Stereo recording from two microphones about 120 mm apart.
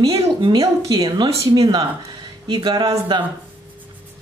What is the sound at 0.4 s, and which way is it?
Speech, 35° right (ahead or behind).